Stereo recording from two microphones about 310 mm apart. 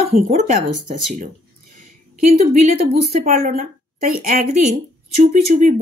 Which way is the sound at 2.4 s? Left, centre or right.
Right.